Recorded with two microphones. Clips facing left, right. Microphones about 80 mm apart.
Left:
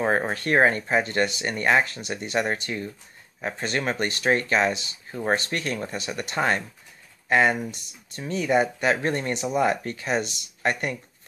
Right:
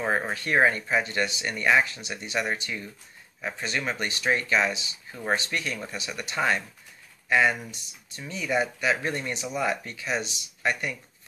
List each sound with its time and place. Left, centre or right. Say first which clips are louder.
0.3 s speech: even; left